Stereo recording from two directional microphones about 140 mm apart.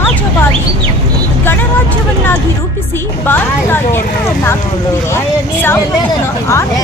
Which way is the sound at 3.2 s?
15° left (ahead or behind).